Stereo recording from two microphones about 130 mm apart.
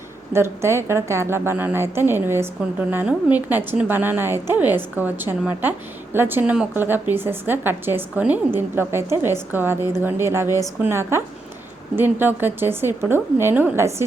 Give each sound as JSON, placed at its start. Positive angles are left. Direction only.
{"t": 0.3, "sound": "a woman's voice", "side_deg": -20}